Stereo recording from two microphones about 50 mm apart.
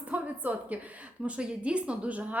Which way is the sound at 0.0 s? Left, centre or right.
Right.